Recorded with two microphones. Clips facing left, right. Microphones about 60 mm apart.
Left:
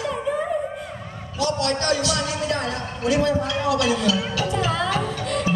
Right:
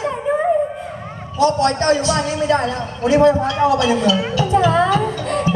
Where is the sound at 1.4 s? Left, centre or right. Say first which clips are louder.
Right 7 dB; right.